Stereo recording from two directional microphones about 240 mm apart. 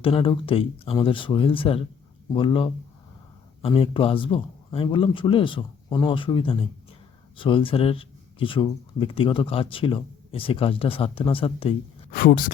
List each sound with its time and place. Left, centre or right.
0.0 s speech: left
12.1 s speech: left